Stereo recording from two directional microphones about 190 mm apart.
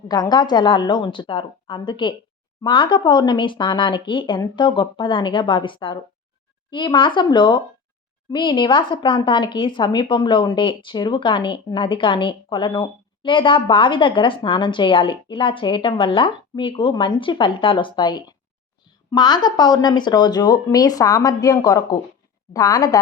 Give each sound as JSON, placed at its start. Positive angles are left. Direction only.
{"t": 0.1, "sound": "a woman's voice", "side_deg": 20}